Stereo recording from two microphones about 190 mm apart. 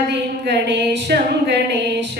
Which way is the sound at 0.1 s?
65° right (ahead or behind).